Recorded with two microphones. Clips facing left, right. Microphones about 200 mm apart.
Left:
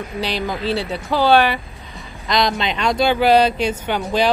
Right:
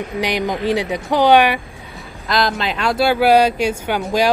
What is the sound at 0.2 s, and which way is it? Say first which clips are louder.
Speech: right 3 dB; 15° right (ahead or behind).